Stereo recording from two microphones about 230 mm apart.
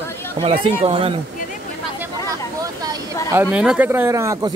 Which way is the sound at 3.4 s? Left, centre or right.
Centre.